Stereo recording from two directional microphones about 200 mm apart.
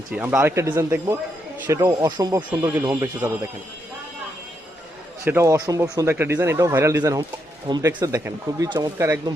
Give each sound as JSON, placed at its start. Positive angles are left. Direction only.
{"t": 0.1, "sound": "speech", "side_deg": -5}
{"t": 5.2, "sound": "speech", "side_deg": -10}